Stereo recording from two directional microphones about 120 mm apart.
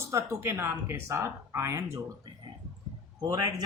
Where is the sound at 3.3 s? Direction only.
30° right (ahead or behind).